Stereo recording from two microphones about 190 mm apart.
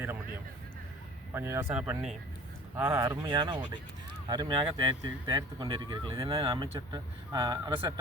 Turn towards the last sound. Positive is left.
turn(degrees=-20)  # may be behind; listen again after turning